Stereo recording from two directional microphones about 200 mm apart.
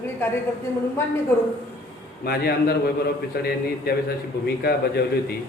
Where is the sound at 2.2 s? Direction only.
50° left (ahead or behind).